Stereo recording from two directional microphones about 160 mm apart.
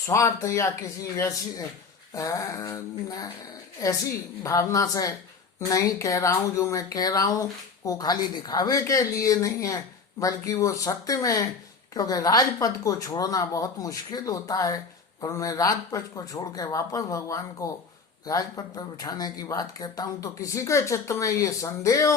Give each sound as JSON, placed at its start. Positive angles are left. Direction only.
{"t": 0.1, "sound": "speech", "side_deg": 20}